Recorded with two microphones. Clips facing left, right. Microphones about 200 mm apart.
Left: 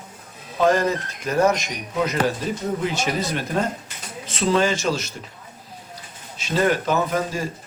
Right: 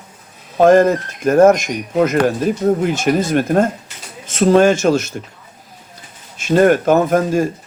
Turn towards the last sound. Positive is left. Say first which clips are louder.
# right 9 dB
turn(degrees=-50)  # may be behind; listen again after turning